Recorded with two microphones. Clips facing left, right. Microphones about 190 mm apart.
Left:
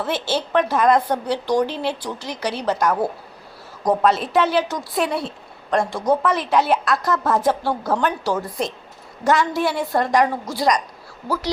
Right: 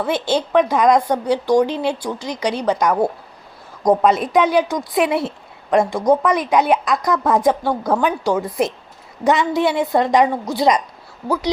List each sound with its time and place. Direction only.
0.0 s a woman's voice: 15° right (ahead or behind)
3.8 s a woman's voice: 15° right (ahead or behind)